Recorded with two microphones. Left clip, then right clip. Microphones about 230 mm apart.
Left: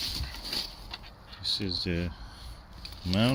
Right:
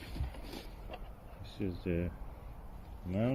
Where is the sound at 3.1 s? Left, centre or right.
Left.